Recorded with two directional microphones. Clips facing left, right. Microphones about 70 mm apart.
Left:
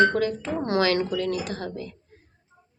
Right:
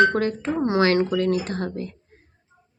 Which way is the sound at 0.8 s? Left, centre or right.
Right.